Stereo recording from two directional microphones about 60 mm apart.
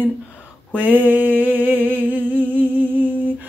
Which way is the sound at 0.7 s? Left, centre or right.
Right.